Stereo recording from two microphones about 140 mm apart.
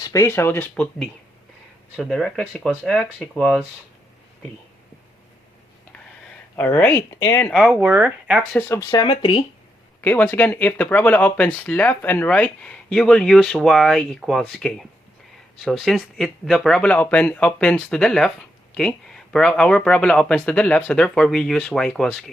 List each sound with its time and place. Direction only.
0.0 s speech: 25° left (ahead or behind)
2.0 s speech: 5° left (ahead or behind)
6.6 s speech: 15° left (ahead or behind)
7.4 s speech: centre (ahead or behind)
7.8 s speech: 15° right (ahead or behind)
8.5 s speech: 15° left (ahead or behind)
8.8 s speech: 30° left (ahead or behind)
10.0 s speech: 15° left (ahead or behind)